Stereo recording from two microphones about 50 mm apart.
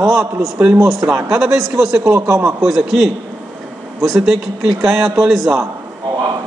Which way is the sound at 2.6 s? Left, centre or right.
Centre.